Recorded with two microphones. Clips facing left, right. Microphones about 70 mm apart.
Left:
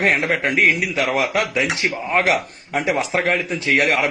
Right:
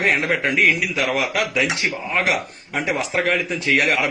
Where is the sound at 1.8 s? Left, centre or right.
Left.